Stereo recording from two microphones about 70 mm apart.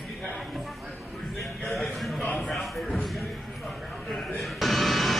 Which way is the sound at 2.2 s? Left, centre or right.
Centre.